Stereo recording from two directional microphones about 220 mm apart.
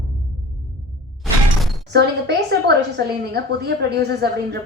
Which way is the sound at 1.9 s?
50° right (ahead or behind).